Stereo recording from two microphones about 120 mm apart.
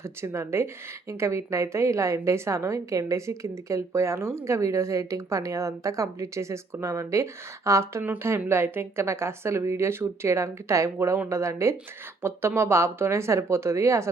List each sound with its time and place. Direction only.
0.0 s speech: 20° right (ahead or behind)